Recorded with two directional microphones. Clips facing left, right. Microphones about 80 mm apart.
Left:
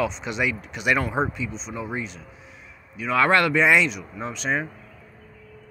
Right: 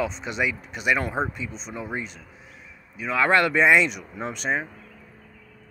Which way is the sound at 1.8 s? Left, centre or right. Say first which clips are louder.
Left 1 dB; right.